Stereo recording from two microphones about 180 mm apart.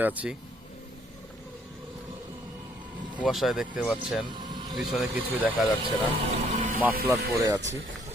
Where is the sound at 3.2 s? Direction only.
Centre (ahead or behind).